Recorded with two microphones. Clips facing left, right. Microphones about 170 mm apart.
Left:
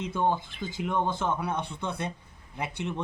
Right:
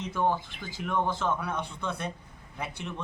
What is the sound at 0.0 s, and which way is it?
Speech, 20° left (ahead or behind).